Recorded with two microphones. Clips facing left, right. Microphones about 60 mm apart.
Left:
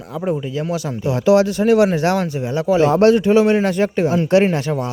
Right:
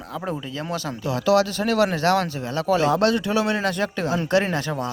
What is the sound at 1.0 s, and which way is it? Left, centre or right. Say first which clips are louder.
A man's voice: left 5 dB; left.